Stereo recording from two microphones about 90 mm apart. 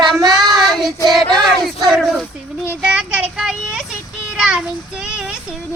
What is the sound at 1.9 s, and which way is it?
Speech, centre (ahead or behind).